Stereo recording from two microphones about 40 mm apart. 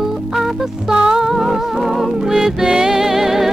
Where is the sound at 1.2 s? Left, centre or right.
Centre.